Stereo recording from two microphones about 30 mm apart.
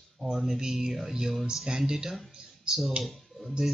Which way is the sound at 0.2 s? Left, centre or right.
Centre.